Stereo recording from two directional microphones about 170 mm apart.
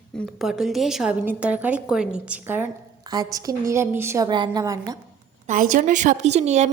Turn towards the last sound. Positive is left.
turn(degrees=-40)  # may be behind; listen again after turning